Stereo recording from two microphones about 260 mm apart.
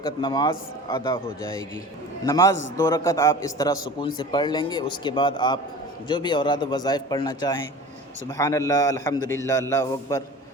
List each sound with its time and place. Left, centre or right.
0.2 s a man's voice: centre
2.2 s a man's voice: centre